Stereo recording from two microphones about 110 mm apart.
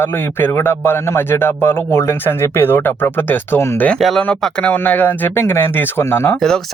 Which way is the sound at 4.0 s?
Centre (ahead or behind).